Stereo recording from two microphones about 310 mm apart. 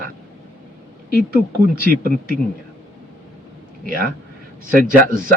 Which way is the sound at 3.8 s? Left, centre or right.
Right.